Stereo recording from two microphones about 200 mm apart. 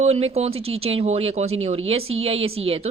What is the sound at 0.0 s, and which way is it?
A woman's voice, 30° right (ahead or behind).